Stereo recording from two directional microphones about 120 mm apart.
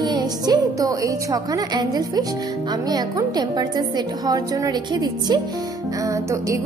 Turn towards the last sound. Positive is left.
turn(degrees=-25)  # may be behind; listen again after turning